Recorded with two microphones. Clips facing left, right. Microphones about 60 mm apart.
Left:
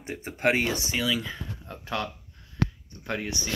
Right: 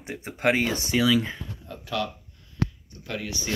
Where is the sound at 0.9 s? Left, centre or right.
Right.